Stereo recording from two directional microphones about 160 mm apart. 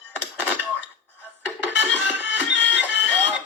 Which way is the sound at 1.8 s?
10° right (ahead or behind).